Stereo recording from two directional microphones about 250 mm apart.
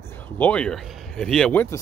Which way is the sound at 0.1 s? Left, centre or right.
Centre.